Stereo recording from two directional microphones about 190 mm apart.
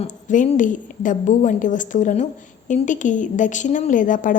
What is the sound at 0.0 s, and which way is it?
A woman's voice, 35° left (ahead or behind).